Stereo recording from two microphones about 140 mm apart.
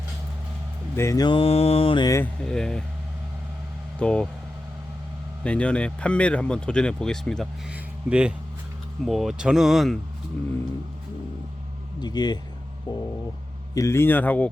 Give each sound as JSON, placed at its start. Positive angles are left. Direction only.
{"t": 0.9, "sound": "mantra", "side_deg": 20}
{"t": 2.0, "sound": "speech", "side_deg": 20}
{"t": 2.4, "sound": "speech", "side_deg": 5}
{"t": 3.9, "sound": "speech", "side_deg": 10}
{"t": 5.4, "sound": "speech", "side_deg": 10}
{"t": 7.7, "sound": "speech", "side_deg": -5}
{"t": 11.9, "sound": "mantra", "side_deg": 30}
{"t": 13.7, "sound": "speech", "side_deg": 20}